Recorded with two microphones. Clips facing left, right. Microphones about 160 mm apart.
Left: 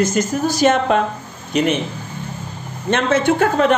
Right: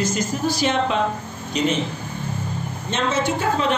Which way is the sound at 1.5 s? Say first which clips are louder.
Left 4 dB; 60° left (ahead or behind).